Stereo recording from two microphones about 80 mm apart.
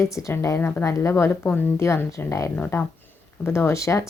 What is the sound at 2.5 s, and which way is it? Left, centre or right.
Speech, left.